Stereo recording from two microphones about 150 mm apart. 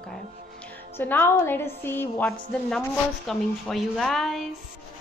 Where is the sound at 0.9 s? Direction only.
10° left (ahead or behind).